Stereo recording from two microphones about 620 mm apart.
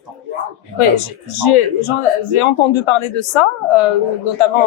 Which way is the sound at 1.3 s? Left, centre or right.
Left.